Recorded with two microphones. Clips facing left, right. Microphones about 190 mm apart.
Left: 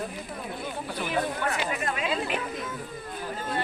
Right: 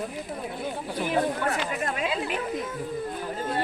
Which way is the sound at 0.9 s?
40° right (ahead or behind).